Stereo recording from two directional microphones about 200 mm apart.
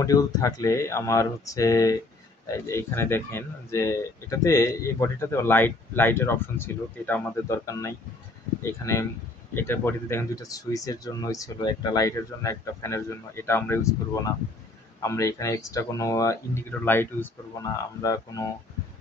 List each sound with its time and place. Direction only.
0.0 s speech: 15° left (ahead or behind)
15.0 s speech: 15° left (ahead or behind)